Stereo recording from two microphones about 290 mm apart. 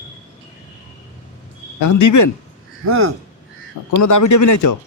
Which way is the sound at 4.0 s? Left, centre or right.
Left.